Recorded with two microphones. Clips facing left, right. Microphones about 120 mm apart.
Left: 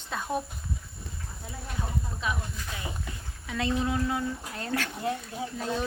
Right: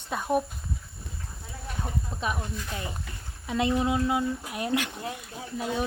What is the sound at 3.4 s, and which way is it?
Speech, 20° right (ahead or behind).